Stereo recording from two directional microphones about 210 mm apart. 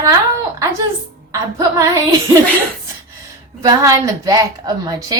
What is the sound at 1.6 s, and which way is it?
Speech, 15° right (ahead or behind).